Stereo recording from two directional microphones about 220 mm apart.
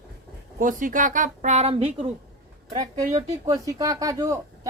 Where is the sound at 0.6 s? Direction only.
35° right (ahead or behind).